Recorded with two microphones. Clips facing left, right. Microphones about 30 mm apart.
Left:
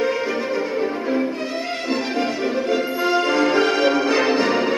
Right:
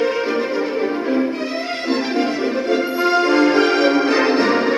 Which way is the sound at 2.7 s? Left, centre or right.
Right.